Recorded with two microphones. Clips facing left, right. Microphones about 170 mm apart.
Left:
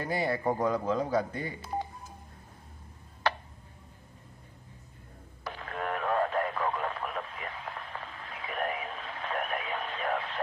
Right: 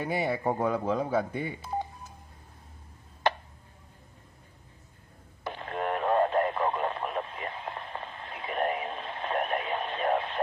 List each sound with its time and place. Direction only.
0.0 s a man's voice: 5° right (ahead or behind)
5.4 s radio: 25° right (ahead or behind)